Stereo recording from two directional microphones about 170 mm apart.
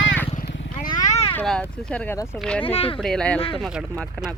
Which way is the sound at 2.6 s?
35° left (ahead or behind).